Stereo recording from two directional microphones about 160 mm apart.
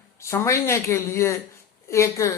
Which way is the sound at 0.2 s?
15° left (ahead or behind).